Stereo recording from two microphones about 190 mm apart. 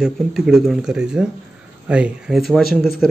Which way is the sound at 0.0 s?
Centre (ahead or behind).